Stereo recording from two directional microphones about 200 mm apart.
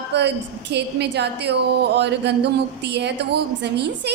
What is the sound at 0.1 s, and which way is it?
A woman's voice, 60° right (ahead or behind).